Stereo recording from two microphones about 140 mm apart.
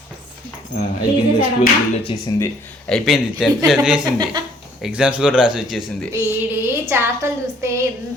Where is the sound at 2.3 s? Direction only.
30° left (ahead or behind).